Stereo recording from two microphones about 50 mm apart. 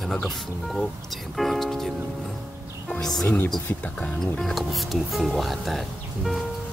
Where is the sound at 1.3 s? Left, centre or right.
Centre.